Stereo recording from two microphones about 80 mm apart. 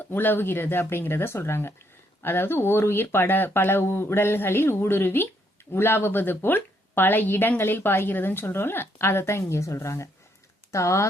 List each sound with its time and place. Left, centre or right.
0.0 s speech: left